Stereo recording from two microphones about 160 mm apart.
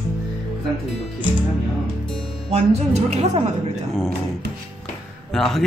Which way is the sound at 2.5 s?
40° right (ahead or behind).